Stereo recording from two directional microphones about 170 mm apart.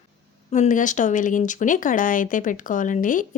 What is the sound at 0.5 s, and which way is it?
Speech, 45° left (ahead or behind).